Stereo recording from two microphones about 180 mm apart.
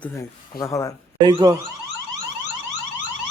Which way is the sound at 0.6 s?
20° left (ahead or behind).